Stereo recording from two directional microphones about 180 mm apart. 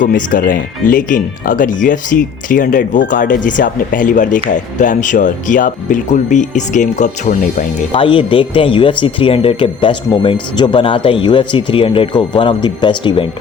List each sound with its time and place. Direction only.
0.0 s speech: 50° left (ahead or behind)
7.9 s speech: 30° left (ahead or behind)